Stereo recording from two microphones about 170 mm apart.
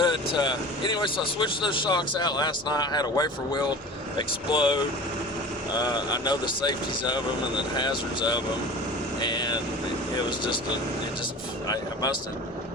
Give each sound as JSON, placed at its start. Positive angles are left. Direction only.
{"t": 0.0, "sound": "speech", "side_deg": 25}